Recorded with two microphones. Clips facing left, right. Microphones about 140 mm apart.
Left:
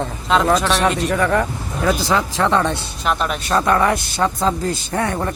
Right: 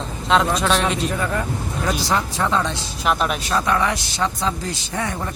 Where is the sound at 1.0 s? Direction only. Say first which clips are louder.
Left 5 dB; 75° left (ahead or behind); by 2.8 s 60° left (ahead or behind).